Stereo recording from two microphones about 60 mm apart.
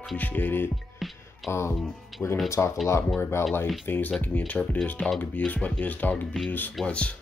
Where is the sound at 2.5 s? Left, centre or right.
Left.